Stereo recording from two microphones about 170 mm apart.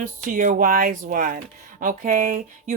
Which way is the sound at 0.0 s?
50° right (ahead or behind).